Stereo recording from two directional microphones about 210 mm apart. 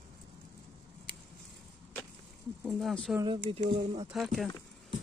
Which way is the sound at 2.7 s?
Centre (ahead or behind).